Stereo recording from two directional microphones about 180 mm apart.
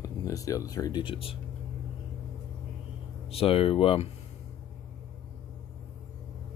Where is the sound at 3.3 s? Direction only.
30° left (ahead or behind).